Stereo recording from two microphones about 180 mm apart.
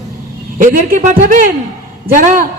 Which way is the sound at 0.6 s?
50° right (ahead or behind).